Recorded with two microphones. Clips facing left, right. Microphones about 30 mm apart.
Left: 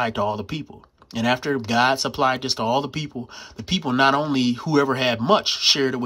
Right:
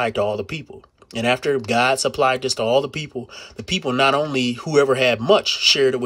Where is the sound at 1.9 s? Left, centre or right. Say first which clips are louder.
Right 3 dB; right.